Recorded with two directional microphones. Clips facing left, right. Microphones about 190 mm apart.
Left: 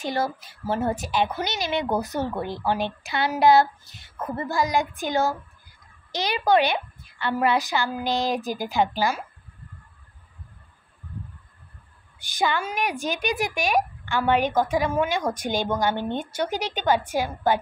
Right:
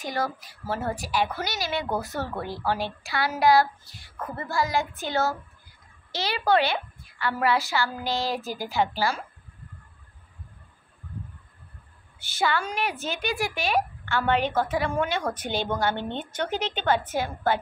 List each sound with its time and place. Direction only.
0.0 s a woman's voice: 25° left (ahead or behind)
12.2 s a woman's voice: 15° left (ahead or behind)